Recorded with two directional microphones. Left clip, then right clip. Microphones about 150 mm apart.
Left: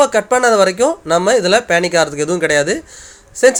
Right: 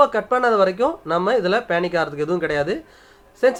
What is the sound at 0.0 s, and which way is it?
Speech, 25° left (ahead or behind).